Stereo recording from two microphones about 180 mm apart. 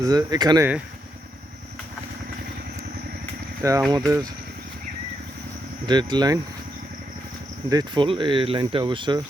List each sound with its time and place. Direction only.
0.0 s speech: 20° right (ahead or behind)
3.6 s speech: 20° right (ahead or behind)
5.8 s speech: 25° right (ahead or behind)
7.7 s speech: 25° right (ahead or behind)